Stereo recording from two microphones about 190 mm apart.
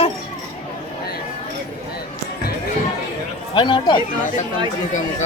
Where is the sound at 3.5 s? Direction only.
25° left (ahead or behind).